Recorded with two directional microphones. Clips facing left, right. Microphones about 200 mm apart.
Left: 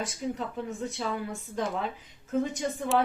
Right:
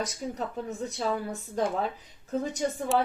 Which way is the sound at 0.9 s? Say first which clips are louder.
Right 2 dB; 40° right (ahead or behind).